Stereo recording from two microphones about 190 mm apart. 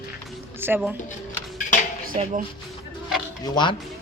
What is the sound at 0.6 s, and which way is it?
Speech, 10° right (ahead or behind).